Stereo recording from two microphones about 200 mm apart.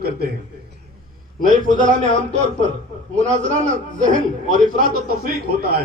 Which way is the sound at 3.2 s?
35° right (ahead or behind).